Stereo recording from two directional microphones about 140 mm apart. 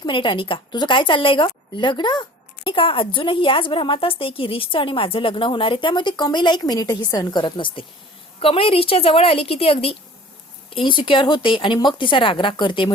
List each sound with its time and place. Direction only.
0.0 s a woman's voice: 35° left (ahead or behind)